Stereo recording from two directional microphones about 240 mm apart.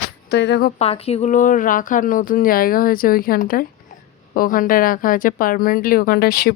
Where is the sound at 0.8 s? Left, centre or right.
Left.